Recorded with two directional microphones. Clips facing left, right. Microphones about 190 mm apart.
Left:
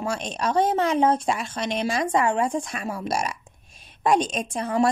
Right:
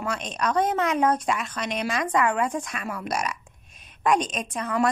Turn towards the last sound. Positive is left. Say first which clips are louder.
# left 3 dB
turn(degrees=30)  # may be behind; listen again after turning